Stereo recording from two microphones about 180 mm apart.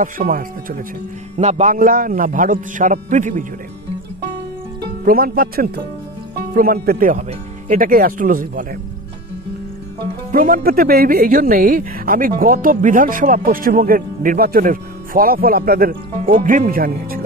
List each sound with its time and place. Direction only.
0.0 s speech: 50° right (ahead or behind)
1.3 s speech: 40° right (ahead or behind)
5.0 s speech: 55° right (ahead or behind)
10.3 s speech: 50° right (ahead or behind)